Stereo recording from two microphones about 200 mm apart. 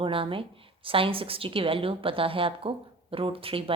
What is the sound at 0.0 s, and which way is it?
A woman's voice, 25° right (ahead or behind).